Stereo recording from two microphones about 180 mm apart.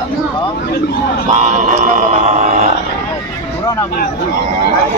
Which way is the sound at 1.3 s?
40° right (ahead or behind).